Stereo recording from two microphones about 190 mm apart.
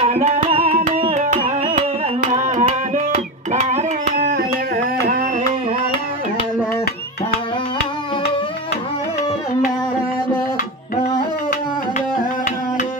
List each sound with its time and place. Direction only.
0.0 s music: 35° right (ahead or behind)
2.3 s carnatic music: 40° right (ahead or behind)
3.5 s a sound: 40° right (ahead or behind)